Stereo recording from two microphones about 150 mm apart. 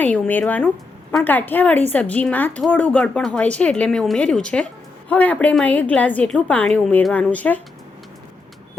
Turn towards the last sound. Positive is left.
turn(degrees=10)  # may be behind; listen again after turning